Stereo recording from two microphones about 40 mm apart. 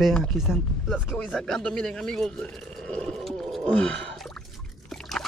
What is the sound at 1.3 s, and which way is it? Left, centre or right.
Speech, centre.